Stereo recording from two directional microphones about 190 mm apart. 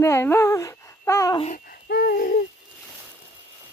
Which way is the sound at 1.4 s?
45° left (ahead or behind).